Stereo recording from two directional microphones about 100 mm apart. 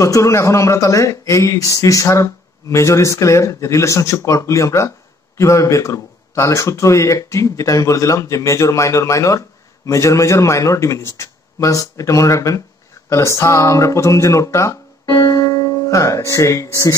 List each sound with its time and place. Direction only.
0.0 s speech: 35° left (ahead or behind)